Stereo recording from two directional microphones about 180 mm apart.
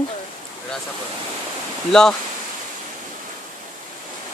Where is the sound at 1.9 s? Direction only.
5° left (ahead or behind).